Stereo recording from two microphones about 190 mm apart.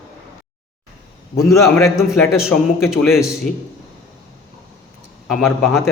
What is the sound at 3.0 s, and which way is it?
Speech, 15° left (ahead or behind).